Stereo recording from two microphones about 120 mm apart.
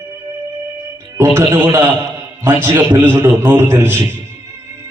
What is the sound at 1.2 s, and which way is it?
A man's voice, 20° right (ahead or behind).